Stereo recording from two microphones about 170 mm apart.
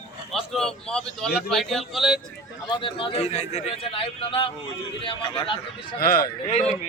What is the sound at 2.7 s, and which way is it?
A man's voice, 30° left (ahead or behind).